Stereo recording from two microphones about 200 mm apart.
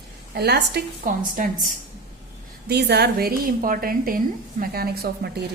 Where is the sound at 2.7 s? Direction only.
55° right (ahead or behind).